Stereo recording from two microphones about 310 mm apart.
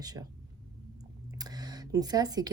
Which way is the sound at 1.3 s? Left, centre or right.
Centre.